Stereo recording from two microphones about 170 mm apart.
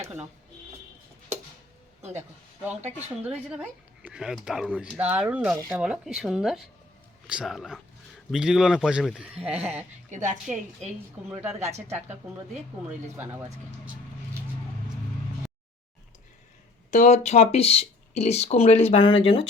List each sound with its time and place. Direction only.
3.2 s speech: 10° right (ahead or behind)
9.3 s a woman's voice: 35° right (ahead or behind)
11.2 s speech: 5° right (ahead or behind)
16.9 s speech: 45° left (ahead or behind)